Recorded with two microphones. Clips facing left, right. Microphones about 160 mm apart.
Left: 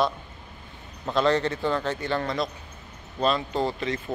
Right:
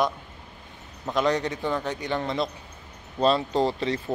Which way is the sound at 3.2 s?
35° right (ahead or behind).